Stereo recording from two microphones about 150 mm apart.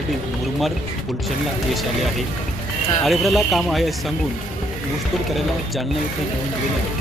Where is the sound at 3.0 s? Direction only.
Centre (ahead or behind).